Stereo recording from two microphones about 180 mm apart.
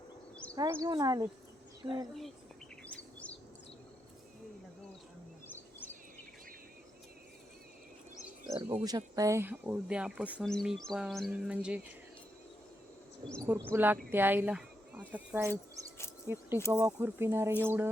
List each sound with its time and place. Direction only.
0.5 s speech: 20° right (ahead or behind)
2.8 s chirp: 5° left (ahead or behind)
8.5 s speech: 25° right (ahead or behind); by 11.9 s 5° right (ahead or behind)
13.7 s speech: 10° right (ahead or behind)